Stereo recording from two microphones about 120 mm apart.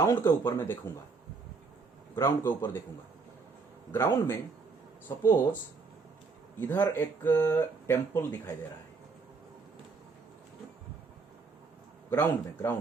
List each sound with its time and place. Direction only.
0.0 s speech: 25° left (ahead or behind)
2.1 s speech: 20° left (ahead or behind)
3.9 s speech: 20° left (ahead or behind)
6.6 s speech: 15° left (ahead or behind)
12.1 s speech: 15° left (ahead or behind)